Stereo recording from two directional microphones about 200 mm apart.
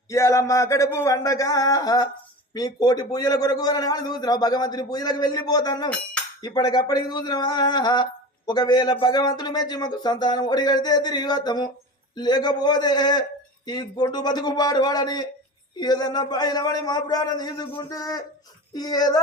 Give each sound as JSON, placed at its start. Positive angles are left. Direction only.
{"t": 0.1, "sound": "a man's voice", "side_deg": 15}